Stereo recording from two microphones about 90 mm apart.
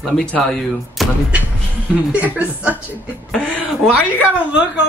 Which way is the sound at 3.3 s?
10° left (ahead or behind).